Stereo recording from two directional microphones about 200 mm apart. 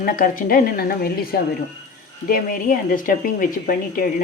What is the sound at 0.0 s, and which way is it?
A woman's voice, 45° left (ahead or behind).